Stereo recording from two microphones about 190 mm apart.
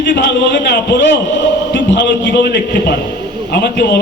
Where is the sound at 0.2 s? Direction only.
60° left (ahead or behind).